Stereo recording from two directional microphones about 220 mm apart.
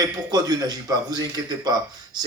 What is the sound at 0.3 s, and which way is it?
A man's voice, 20° right (ahead or behind).